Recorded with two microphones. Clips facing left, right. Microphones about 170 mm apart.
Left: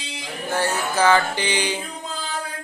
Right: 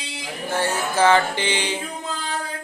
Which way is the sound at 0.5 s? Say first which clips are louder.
Right 1 dB; 25° right (ahead or behind).